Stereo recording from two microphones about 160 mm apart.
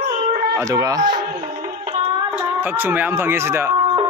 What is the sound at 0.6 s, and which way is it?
Speech, 20° right (ahead or behind).